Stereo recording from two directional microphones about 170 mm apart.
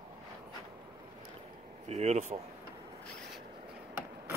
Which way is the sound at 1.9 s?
40° right (ahead or behind).